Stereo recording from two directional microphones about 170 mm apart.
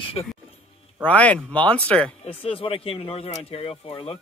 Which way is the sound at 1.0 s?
10° left (ahead or behind).